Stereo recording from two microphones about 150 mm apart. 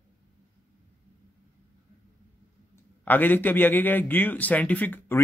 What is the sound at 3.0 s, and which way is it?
A man's voice, 10° left (ahead or behind).